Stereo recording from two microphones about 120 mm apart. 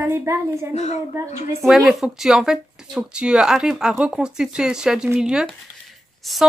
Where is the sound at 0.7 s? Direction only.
65° left (ahead or behind).